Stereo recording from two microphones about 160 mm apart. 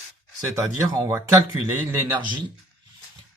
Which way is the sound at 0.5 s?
20° right (ahead or behind).